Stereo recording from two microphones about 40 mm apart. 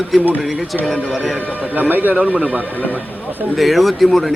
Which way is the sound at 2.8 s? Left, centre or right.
Left.